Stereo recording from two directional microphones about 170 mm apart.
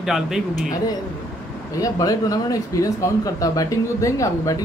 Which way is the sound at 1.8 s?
20° left (ahead or behind).